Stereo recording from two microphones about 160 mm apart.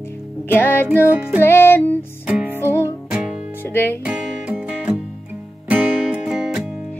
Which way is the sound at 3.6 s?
15° left (ahead or behind).